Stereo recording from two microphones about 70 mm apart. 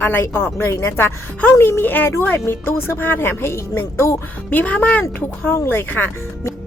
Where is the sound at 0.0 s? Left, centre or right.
Left.